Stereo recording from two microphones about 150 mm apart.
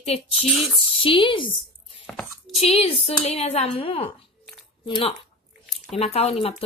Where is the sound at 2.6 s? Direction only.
40° left (ahead or behind).